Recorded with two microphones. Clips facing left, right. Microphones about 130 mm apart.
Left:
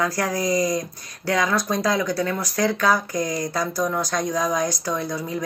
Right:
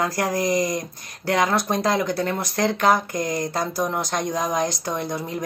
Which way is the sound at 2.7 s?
50° right (ahead or behind).